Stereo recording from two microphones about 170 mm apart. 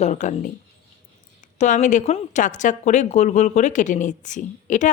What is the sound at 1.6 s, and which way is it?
Speech, 45° left (ahead or behind).